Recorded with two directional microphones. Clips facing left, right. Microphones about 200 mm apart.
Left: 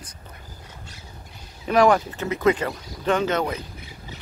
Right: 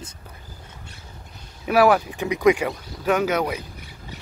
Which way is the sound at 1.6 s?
5° right (ahead or behind).